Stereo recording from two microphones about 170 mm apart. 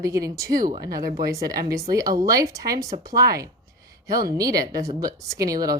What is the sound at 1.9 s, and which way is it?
Speech, 20° right (ahead or behind).